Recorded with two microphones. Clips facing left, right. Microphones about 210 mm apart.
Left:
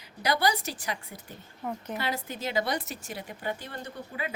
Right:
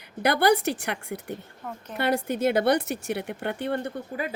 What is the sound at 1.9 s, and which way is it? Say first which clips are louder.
Speech: right 11 dB; 55° right (ahead or behind).